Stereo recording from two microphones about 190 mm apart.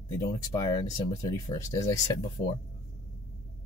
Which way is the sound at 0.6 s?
20° left (ahead or behind).